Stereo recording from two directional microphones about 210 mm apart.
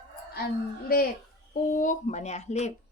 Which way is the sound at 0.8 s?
45° left (ahead or behind).